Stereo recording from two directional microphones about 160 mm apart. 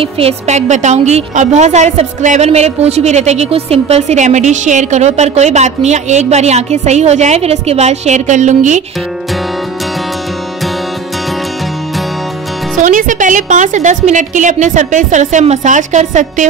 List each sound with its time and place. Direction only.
0.0 s a woman's voice: 40° right (ahead or behind)
12.8 s a woman's voice: 55° right (ahead or behind)